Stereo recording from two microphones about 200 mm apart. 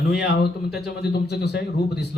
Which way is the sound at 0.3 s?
55° left (ahead or behind).